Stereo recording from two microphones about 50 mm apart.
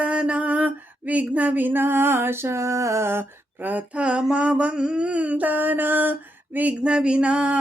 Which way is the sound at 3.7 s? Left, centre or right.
Right.